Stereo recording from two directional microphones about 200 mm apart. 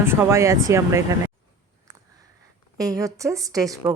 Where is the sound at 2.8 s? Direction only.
15° right (ahead or behind).